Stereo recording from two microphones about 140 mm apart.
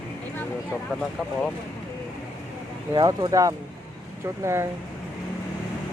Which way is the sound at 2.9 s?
30° right (ahead or behind).